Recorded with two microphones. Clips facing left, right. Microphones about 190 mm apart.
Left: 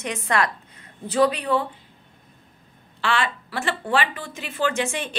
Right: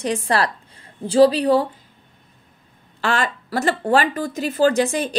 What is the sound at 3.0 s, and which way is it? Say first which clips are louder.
A woman's voice: right 3 dB; 40° right (ahead or behind).